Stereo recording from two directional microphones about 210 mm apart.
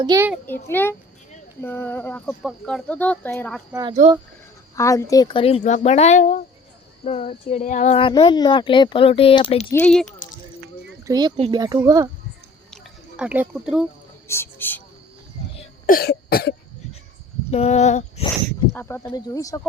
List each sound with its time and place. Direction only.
0.0 s a child's voice: 15° right (ahead or behind)
0.4 s speech: 10° left (ahead or behind)
3.7 s a child's voice: 15° right (ahead or behind)
4.7 s speech: 15° left (ahead or behind)
9.7 s speech: 5° left (ahead or behind)
11.0 s speech: 20° right (ahead or behind)
12.7 s a sound: centre (ahead or behind)
14.3 s speech: 10° left (ahead or behind)
15.9 s cough: 45° left (ahead or behind)
17.5 s speech: 30° left (ahead or behind)
18.7 s speech: 10° left (ahead or behind)